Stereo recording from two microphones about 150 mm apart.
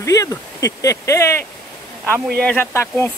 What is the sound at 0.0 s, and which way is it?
Speech, 20° left (ahead or behind).